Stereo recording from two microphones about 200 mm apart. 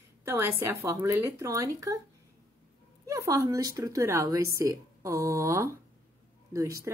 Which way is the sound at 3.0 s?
15° right (ahead or behind).